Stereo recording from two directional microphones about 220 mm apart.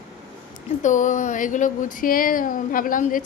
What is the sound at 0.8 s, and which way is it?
A woman's voice, 35° left (ahead or behind).